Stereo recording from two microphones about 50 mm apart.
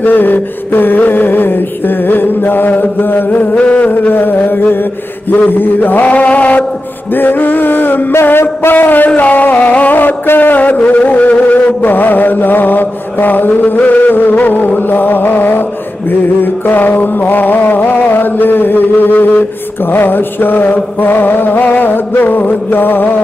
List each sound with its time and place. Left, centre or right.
0.0 s mantra: left
3.9 s a sound: left
5.3 s mantra: left
7.2 s mantra: left
8.1 s a sound: left
16.6 s chant: left
19.9 s mantra: left